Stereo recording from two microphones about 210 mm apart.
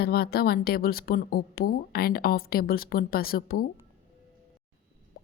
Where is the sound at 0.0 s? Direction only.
50° left (ahead or behind).